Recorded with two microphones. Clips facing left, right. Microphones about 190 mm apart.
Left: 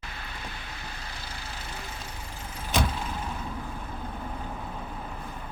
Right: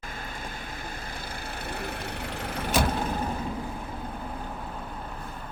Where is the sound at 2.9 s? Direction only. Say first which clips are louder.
Right 6 dB; 55° right (ahead or behind).